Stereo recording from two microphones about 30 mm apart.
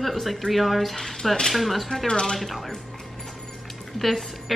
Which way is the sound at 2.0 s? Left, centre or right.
Left.